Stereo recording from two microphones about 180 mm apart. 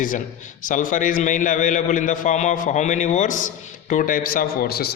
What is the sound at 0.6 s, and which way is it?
A man's voice, 45° left (ahead or behind).